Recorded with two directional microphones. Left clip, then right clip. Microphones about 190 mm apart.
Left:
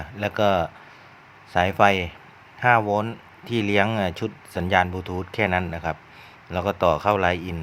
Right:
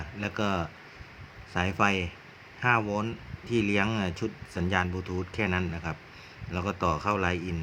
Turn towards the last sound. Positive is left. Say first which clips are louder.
# left 7 dB
turn(degrees=20)  # may be behind; listen again after turning